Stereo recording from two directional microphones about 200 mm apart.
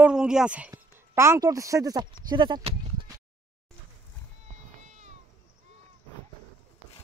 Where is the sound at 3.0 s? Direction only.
25° right (ahead or behind).